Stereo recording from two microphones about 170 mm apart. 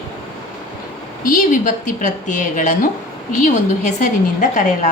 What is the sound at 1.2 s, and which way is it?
A woman's voice, 50° left (ahead or behind).